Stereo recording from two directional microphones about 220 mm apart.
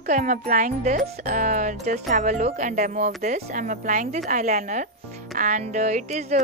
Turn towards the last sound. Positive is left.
turn(degrees=-30)  # may be behind; listen again after turning